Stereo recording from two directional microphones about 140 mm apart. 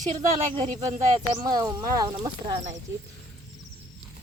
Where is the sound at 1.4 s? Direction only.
30° right (ahead or behind).